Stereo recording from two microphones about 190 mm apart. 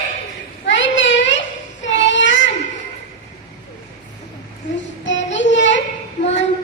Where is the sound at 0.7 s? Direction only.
75° left (ahead or behind).